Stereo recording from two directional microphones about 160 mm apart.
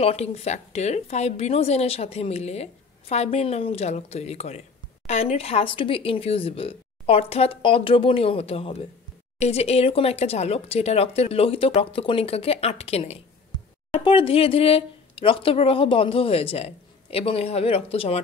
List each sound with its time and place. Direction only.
0.0 s speech: 40° left (ahead or behind)